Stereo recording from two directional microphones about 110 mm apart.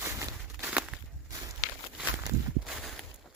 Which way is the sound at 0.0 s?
25° right (ahead or behind).